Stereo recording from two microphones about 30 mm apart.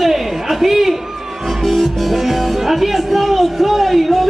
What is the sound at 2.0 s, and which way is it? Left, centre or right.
Speech, centre.